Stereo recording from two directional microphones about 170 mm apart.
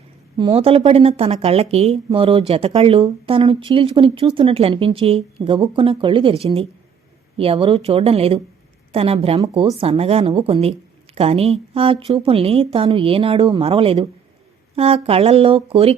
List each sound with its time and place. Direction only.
0.3 s a woman's voice: 30° right (ahead or behind)